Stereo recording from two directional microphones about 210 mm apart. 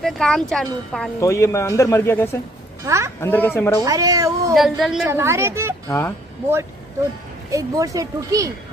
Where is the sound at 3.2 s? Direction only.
10° left (ahead or behind).